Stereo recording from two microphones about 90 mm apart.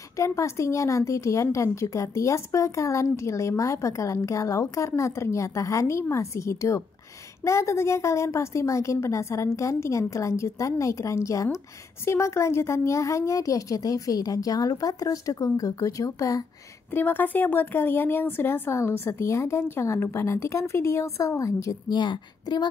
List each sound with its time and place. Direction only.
0.2 s speech: 35° left (ahead or behind)
16.9 s speech: 20° left (ahead or behind)
21.8 s a woman's voice: 55° left (ahead or behind)